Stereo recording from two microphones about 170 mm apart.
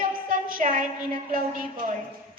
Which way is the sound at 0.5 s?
50° right (ahead or behind).